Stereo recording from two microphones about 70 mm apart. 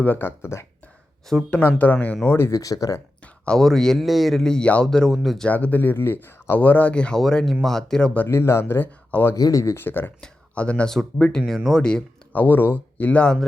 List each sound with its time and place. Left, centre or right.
0.0 s speech: left
2.2 s speech: left
2.5 s speech: left
3.4 s speech: centre
5.5 s speech: left
8.3 s speech: left
9.3 s speech: left
9.7 s speech: left
10.2 s speech: centre
12.3 s speech: left